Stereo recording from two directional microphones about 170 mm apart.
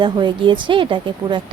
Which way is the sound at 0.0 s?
25° right (ahead or behind).